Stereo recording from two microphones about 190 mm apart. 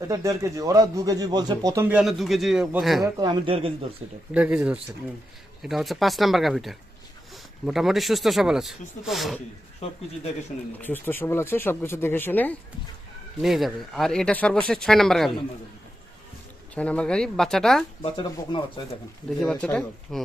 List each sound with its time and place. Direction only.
0.1 s speech: 15° right (ahead or behind); by 3.1 s centre (ahead or behind)
3.2 s speech: 25° right (ahead or behind)
4.4 s speech: 5° right (ahead or behind)
9.8 s speech: 35° left (ahead or behind)
10.8 s speech: 10° left (ahead or behind)
13.4 s speech: centre (ahead or behind)
16.7 s speech: 5° left (ahead or behind)
18.0 s speech: 25° left (ahead or behind)
19.4 s speech: 5° left (ahead or behind)